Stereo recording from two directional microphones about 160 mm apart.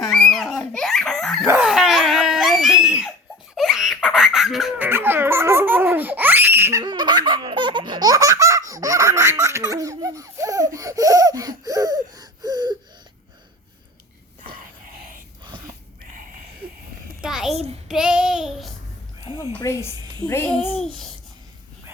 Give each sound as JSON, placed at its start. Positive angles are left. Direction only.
{"t": 0.0, "sound": "dog", "side_deg": 0}
{"t": 3.5, "sound": "laughter", "side_deg": 0}
{"t": 4.9, "sound": "baby laughter", "side_deg": -15}
{"t": 15.4, "sound": "a sound", "side_deg": -25}
{"t": 17.2, "sound": "a sound", "side_deg": -5}
{"t": 17.5, "sound": "child singing", "side_deg": -40}
{"t": 17.8, "sound": "child singing", "side_deg": -5}
{"t": 19.2, "sound": "music", "side_deg": -25}
{"t": 19.5, "sound": "a sound", "side_deg": 15}
{"t": 20.7, "sound": "babbling", "side_deg": 5}